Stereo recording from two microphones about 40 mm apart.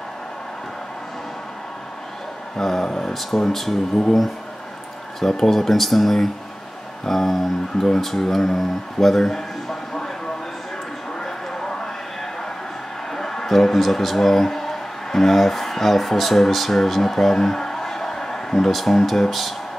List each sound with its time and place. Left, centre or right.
2.5 s speech: centre
5.2 s speech: centre
11.1 s a sound: centre
13.1 s a man's voice: centre
18.7 s speech: centre